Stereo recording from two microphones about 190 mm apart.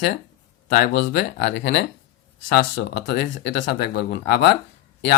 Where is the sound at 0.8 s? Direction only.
65° left (ahead or behind).